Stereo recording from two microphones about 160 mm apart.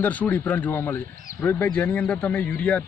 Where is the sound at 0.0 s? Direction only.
10° left (ahead or behind).